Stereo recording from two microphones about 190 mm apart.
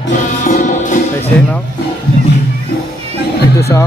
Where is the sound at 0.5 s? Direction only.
40° left (ahead or behind).